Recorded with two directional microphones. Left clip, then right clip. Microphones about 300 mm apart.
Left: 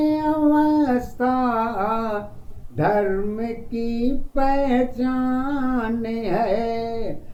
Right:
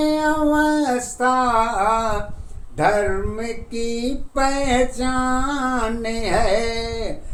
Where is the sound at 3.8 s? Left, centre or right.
Right.